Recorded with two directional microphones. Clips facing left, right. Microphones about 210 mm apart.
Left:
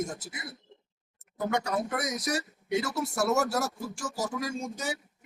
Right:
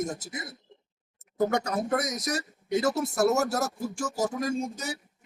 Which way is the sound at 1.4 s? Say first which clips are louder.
Right 3 dB; 40° right (ahead or behind).